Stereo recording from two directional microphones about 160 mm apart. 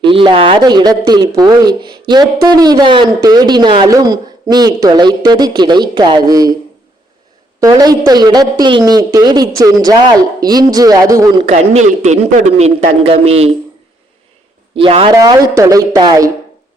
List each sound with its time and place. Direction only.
0.0 s speech: 30° right (ahead or behind)
7.6 s speech: 25° right (ahead or behind)
11.4 s a man's voice: 45° right (ahead or behind)
14.8 s a man's voice: 35° right (ahead or behind)
15.2 s speech: 25° right (ahead or behind)